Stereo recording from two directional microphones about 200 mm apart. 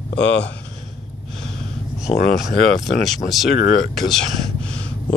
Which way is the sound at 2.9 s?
Centre (ahead or behind).